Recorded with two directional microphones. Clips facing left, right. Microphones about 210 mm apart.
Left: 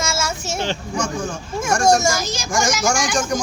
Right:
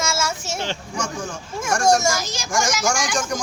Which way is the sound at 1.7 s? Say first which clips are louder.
Left 2 dB; 25° left (ahead or behind).